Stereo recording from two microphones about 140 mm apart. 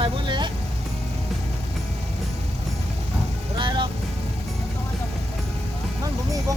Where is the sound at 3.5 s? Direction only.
35° right (ahead or behind).